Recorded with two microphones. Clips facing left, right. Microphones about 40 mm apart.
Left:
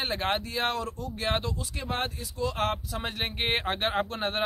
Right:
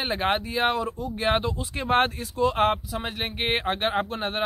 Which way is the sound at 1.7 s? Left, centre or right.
Right.